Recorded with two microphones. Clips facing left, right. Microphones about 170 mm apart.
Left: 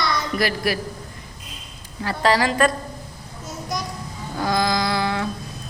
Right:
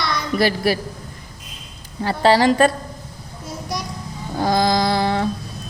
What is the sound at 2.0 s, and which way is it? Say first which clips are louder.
Speech: right 5 dB; 30° right (ahead or behind).